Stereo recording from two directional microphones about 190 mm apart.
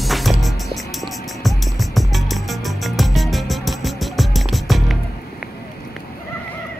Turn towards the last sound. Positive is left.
turn(degrees=0)  # may be behind; listen again after turning